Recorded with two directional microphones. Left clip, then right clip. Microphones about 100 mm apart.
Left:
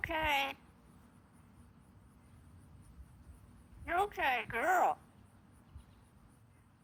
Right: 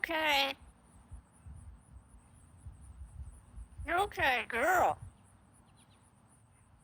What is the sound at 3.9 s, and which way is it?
A woman's voice, 90° right.